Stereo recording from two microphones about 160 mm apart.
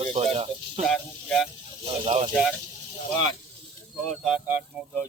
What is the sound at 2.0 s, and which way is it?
Speech, 35° right (ahead or behind).